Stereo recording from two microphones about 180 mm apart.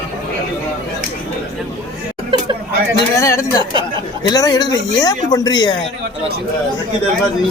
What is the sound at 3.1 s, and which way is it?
Speech, 15° left (ahead or behind).